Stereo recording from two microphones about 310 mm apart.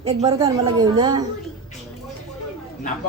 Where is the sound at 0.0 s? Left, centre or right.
Centre.